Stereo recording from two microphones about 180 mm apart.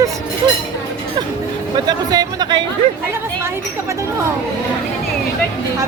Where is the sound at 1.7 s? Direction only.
20° right (ahead or behind).